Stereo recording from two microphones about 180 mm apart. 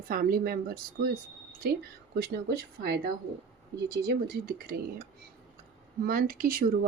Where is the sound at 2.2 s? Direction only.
60° right (ahead or behind).